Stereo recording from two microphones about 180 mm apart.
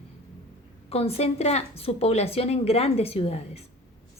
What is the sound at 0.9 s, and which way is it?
A woman's voice, 35° left (ahead or behind).